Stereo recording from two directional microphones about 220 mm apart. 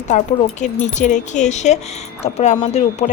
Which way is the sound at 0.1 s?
35° left (ahead or behind).